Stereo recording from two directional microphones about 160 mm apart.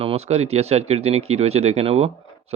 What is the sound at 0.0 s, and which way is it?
A man's voice, 35° right (ahead or behind).